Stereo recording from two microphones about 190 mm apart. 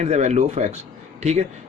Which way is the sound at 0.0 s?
35° right (ahead or behind).